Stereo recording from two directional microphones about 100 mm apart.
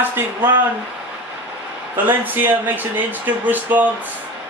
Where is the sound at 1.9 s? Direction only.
20° right (ahead or behind).